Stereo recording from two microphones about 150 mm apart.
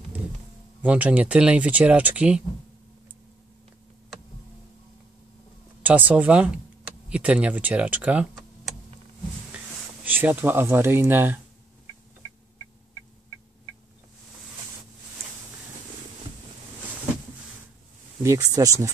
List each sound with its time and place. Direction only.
0.8 s speech: 10° right (ahead or behind)
5.8 s speech: 10° right (ahead or behind)
10.0 s speech: 10° right (ahead or behind)
18.2 s speech: 20° right (ahead or behind)